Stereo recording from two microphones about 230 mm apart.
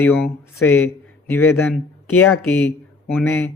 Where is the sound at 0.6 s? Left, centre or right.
Centre.